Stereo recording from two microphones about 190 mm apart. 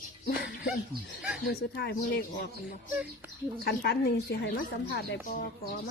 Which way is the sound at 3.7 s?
60° left (ahead or behind).